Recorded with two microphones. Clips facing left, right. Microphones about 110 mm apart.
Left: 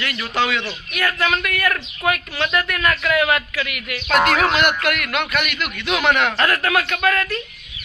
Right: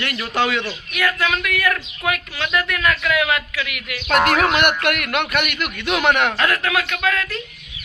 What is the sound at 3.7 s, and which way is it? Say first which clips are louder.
Speech: left 1 dB; 90° right.